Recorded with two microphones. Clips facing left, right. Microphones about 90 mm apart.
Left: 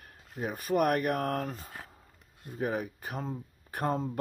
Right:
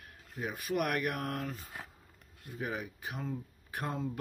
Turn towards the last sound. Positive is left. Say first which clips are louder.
# left 6 dB
turn(degrees=45)  # may be behind; listen again after turning